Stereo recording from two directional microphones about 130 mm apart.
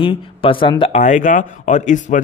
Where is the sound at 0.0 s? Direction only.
45° left (ahead or behind).